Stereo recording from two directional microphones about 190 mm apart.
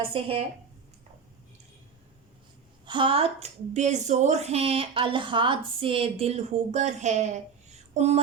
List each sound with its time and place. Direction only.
0.1 s speech: 30° right (ahead or behind)
2.8 s a woman's voice: 25° right (ahead or behind)